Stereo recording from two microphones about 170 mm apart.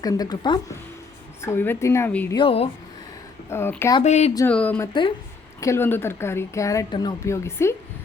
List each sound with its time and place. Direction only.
0.0 s a woman's voice: 20° left (ahead or behind)
1.4 s speech: 10° left (ahead or behind)
2.3 s speech: 30° left (ahead or behind)
3.5 s speech: 15° left (ahead or behind)
4.0 s speech: 40° left (ahead or behind)
4.4 s speech: 10° left (ahead or behind)